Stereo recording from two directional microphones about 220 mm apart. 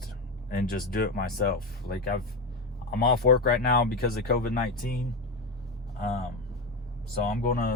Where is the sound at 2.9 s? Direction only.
45° left (ahead or behind).